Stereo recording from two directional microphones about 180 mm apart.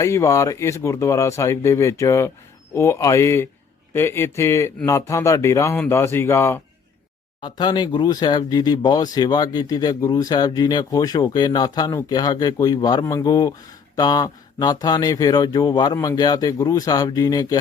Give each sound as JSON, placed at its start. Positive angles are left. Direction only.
{"t": 0.0, "sound": "speech", "side_deg": 15}
{"t": 7.4, "sound": "speech", "side_deg": 25}